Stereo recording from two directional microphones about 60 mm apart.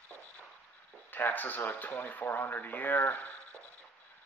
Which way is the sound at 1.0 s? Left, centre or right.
Left.